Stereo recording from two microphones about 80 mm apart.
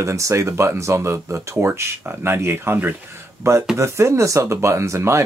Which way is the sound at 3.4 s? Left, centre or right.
Right.